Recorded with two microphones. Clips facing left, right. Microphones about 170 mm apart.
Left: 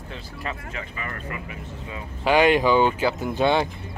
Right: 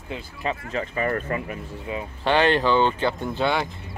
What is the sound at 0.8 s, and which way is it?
Speech, 40° right (ahead or behind).